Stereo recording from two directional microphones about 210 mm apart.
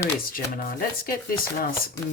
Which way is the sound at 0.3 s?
40° left (ahead or behind).